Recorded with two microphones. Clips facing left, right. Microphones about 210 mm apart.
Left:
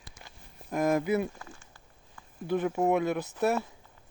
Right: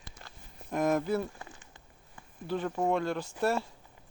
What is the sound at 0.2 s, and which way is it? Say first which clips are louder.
Walk: right 1 dB; 10° left (ahead or behind).